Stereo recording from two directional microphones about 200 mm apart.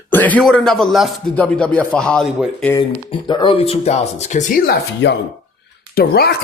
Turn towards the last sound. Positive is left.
turn(degrees=50)  # may be behind; listen again after turning